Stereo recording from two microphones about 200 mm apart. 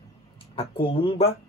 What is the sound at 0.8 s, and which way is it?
Speech, 25° left (ahead or behind).